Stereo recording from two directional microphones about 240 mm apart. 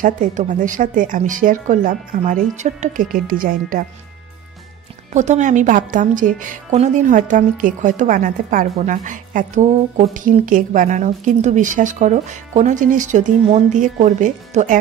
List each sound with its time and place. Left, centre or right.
0.0 s a woman's voice: right
5.1 s a woman's voice: right